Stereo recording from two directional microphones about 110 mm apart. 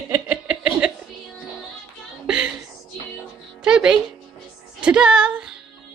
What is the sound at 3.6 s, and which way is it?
Music, 10° right (ahead or behind).